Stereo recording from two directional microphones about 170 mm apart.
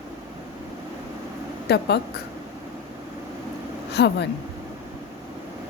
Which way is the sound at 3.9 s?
80° left.